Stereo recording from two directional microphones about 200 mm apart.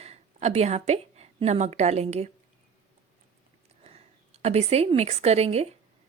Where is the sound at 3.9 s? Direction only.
30° right (ahead or behind).